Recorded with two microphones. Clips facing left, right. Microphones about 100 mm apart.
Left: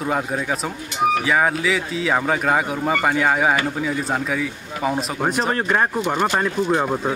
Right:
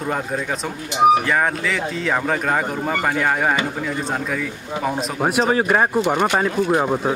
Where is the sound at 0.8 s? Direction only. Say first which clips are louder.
Right 6 dB; 20° right (ahead or behind).